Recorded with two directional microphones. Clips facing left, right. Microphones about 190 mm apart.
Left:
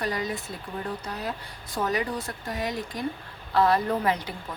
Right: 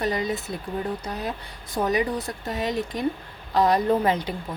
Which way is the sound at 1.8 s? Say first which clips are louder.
Right 4 dB; 20° right (ahead or behind).